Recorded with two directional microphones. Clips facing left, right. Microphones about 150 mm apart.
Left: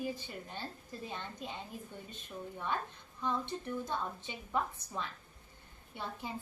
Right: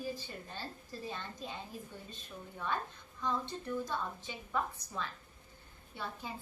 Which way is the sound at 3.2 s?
20° left (ahead or behind).